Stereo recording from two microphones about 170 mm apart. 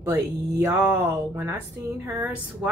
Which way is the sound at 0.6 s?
15° right (ahead or behind).